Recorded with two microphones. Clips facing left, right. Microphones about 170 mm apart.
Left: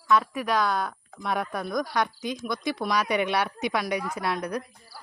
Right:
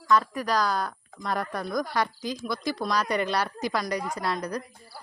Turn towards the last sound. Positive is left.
turn(degrees=0)  # may be behind; listen again after turning